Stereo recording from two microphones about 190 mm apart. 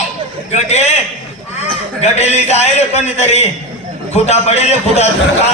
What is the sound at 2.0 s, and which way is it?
A man's voice, 35° left (ahead or behind).